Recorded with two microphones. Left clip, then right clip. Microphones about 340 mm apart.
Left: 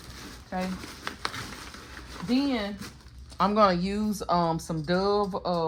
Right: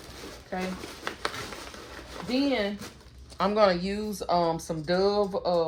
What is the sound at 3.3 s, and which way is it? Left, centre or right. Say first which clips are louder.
Speech: left 1 dB; centre.